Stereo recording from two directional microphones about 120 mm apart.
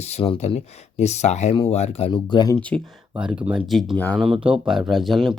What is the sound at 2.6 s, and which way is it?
Speech, 10° left (ahead or behind).